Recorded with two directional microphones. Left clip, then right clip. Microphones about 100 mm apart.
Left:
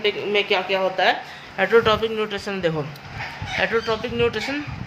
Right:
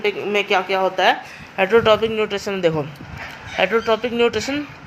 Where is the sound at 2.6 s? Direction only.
65° right (ahead or behind).